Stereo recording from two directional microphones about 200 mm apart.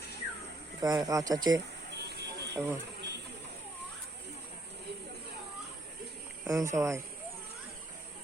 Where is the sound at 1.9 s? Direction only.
55° right (ahead or behind).